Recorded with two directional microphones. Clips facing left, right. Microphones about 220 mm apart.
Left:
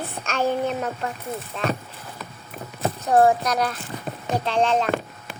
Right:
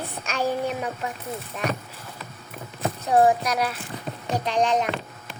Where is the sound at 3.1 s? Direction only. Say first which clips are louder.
Left 1 dB; 10° right (ahead or behind).